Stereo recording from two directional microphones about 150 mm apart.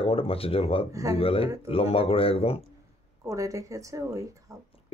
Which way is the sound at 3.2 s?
20° right (ahead or behind).